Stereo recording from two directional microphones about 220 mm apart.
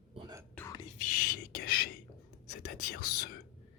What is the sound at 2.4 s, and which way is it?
Whispering, 35° left (ahead or behind).